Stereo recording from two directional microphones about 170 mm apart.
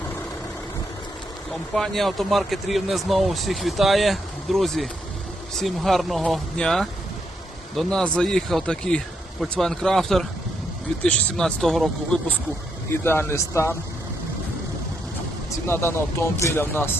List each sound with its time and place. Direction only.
1.7 s speech: centre (ahead or behind)
13.1 s speech: 15° left (ahead or behind)
15.6 s speech: 15° left (ahead or behind)